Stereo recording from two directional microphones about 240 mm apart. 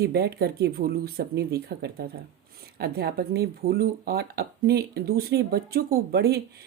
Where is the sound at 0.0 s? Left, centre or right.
Right.